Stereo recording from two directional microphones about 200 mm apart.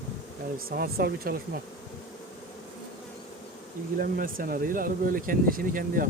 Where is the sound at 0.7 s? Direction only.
50° right (ahead or behind).